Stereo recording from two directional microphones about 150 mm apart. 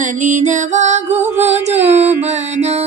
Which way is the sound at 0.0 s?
55° right (ahead or behind).